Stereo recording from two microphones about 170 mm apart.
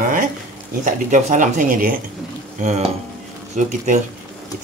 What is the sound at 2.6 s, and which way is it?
Speech, 40° right (ahead or behind).